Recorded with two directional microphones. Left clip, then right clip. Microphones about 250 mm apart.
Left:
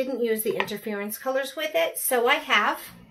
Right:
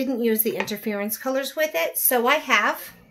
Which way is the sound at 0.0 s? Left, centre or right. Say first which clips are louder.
Right 2 dB; right.